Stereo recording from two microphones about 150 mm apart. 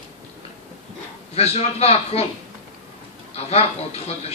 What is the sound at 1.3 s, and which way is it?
Speech, 45° left (ahead or behind).